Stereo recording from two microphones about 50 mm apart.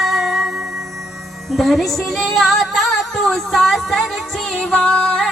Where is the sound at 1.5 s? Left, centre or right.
Centre.